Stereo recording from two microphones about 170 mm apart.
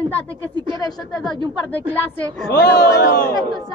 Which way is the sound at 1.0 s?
Centre (ahead or behind).